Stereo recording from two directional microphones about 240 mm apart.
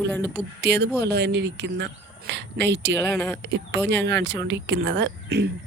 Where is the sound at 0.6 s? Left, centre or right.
Right.